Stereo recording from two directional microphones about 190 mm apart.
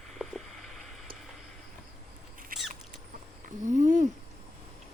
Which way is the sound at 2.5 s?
50° right (ahead or behind).